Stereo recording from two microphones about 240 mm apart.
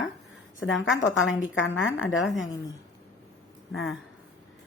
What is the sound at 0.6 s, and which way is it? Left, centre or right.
A woman's voice, left.